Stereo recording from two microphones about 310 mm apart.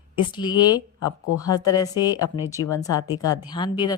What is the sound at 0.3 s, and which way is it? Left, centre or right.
Speech, centre.